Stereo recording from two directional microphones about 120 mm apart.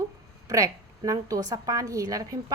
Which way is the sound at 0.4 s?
30° right (ahead or behind).